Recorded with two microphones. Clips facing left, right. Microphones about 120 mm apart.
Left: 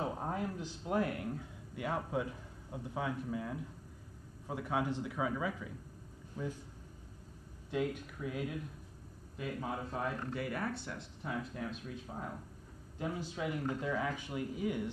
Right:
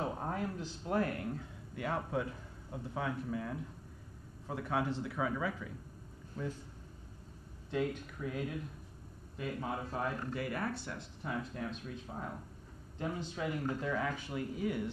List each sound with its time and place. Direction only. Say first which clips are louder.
0.0 s speech: even; 15° left (ahead or behind)
7.7 s speech: even; 10° left (ahead or behind)